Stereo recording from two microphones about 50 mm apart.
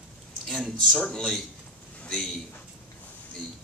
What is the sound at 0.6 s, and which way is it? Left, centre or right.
A man's voice, centre.